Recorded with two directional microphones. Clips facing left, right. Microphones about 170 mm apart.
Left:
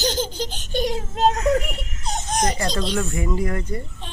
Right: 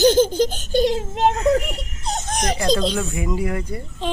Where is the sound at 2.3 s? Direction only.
90° right.